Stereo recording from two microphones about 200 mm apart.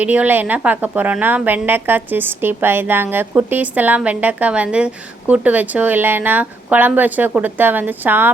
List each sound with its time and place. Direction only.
0.0 s a woman's voice: 5° right (ahead or behind)